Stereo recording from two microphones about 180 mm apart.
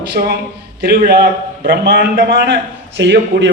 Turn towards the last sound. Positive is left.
turn(degrees=-75)  # may be behind; listen again after turning